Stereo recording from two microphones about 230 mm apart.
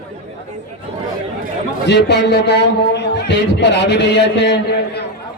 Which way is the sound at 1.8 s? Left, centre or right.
Left.